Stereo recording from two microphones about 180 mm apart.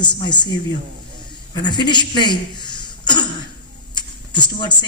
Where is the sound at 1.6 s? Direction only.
25° left (ahead or behind).